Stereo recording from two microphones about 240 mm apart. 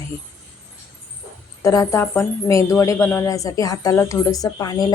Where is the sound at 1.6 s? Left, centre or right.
Centre.